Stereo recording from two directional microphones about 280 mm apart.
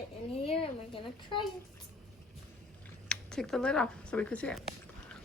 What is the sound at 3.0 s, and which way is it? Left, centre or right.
Speech, centre.